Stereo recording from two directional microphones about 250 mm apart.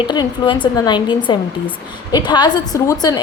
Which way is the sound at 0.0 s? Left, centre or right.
Centre.